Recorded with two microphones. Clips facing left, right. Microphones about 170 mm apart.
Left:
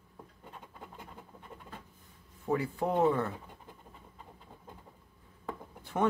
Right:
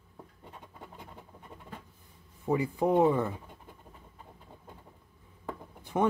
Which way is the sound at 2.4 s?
15° right (ahead or behind).